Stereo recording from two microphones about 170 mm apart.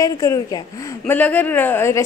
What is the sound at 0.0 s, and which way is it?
A woman's voice, 20° left (ahead or behind).